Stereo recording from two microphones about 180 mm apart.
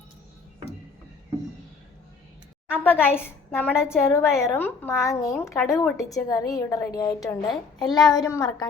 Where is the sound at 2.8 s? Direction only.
10° left (ahead or behind).